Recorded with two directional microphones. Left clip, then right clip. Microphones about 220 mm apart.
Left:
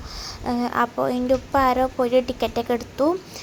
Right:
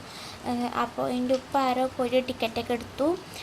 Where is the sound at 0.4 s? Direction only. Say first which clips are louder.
Left 6 dB; 25° left (ahead or behind).